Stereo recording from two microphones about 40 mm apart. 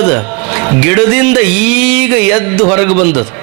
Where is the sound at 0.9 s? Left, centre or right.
Centre.